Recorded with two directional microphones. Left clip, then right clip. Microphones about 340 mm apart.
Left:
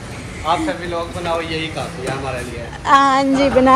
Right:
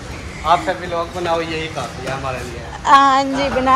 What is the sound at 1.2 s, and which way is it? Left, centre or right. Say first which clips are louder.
Speech: right 1 dB; right.